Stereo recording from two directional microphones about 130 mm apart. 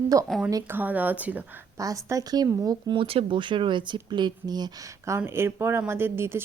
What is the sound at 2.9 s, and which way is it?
Speech, 45° right (ahead or behind).